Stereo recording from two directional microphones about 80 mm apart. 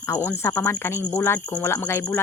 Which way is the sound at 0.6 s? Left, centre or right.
Left.